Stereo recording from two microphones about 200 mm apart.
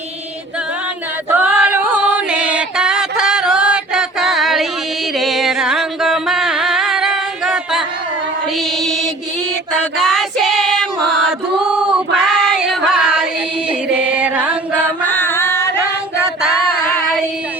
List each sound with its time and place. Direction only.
1.3 s music: 5° right (ahead or behind)
10.0 s choir: centre (ahead or behind)
13.7 s music: 5° right (ahead or behind)
14.8 s music: 10° left (ahead or behind)
16.6 s female singing: 45° left (ahead or behind)